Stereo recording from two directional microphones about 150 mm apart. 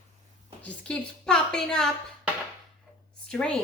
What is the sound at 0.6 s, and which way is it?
A woman's voice, 10° left (ahead or behind).